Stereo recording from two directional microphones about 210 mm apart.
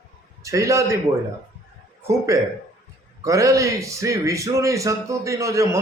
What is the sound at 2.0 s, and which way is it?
A man's voice, 15° right (ahead or behind).